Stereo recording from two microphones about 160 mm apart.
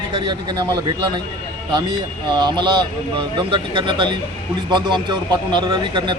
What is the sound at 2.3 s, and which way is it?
A man's voice, 30° right (ahead or behind).